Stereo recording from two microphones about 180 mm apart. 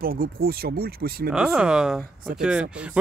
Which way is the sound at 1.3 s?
5° right (ahead or behind).